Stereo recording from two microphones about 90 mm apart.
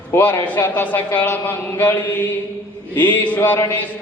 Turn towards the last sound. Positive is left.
turn(degrees=20)  # may be behind; listen again after turning